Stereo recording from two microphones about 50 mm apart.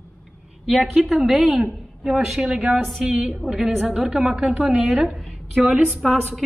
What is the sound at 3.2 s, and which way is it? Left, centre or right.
A woman's voice, centre.